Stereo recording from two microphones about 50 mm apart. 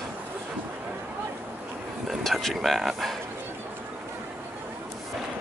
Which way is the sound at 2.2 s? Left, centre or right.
Centre.